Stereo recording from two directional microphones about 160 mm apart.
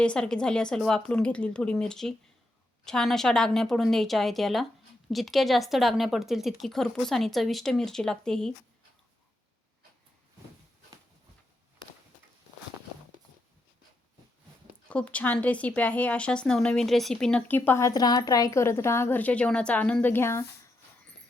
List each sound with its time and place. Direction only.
0.0 s speech: 5° left (ahead or behind)
14.8 s a woman's voice: 10° left (ahead or behind)